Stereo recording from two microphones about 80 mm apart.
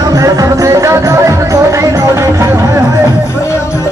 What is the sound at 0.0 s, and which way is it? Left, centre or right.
Music, right.